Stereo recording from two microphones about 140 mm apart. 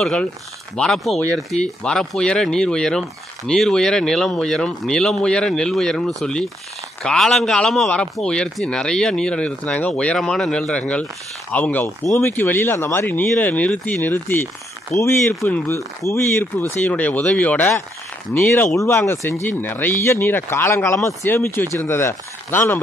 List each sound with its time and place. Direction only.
0.0 s speech: 5° left (ahead or behind)